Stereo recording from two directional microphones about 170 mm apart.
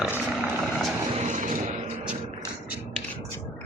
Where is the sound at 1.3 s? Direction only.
50° right (ahead or behind).